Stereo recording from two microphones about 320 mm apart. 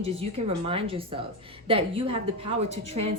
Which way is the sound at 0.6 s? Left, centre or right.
Centre.